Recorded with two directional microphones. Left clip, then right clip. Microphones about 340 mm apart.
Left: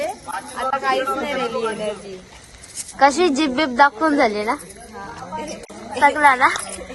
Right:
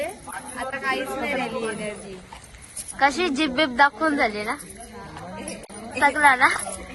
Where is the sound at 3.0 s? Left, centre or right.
Centre.